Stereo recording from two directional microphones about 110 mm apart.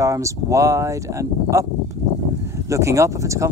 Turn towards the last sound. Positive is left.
turn(degrees=-25)  # may be behind; listen again after turning